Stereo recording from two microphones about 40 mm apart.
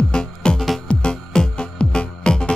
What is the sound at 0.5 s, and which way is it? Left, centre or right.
Music, centre.